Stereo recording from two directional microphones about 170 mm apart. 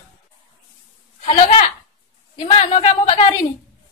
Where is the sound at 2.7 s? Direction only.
40° left (ahead or behind).